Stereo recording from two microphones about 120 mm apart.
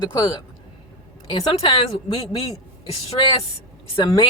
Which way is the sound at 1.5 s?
50° left (ahead or behind).